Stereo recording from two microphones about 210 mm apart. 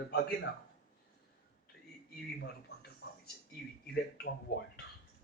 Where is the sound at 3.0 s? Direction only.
55° left (ahead or behind).